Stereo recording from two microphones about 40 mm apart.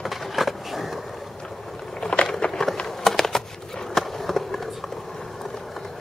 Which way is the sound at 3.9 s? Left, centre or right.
Centre.